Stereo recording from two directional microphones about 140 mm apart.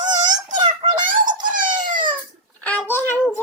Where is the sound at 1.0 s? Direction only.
70° right (ahead or behind).